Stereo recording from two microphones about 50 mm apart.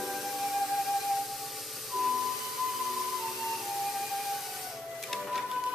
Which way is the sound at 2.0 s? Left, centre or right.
Centre.